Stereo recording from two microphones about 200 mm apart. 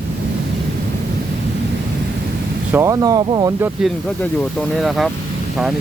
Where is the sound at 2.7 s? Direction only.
15° right (ahead or behind).